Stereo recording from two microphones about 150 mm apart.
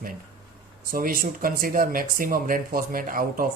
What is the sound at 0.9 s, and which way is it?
Speech, 70° right (ahead or behind).